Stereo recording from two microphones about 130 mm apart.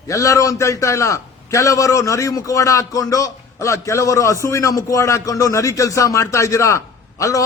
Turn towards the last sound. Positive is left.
turn(degrees=25)  # may be behind; listen again after turning